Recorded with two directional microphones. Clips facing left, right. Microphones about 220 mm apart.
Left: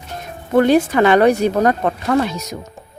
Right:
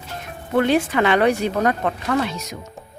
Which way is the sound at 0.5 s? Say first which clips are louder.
Left 5 dB; 40° left (ahead or behind).